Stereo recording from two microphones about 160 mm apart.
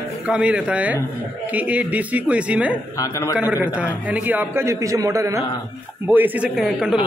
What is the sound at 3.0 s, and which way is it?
Speech, 20° left (ahead or behind).